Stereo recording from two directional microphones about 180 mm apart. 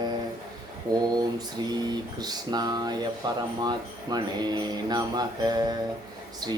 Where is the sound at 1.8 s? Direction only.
20° right (ahead or behind).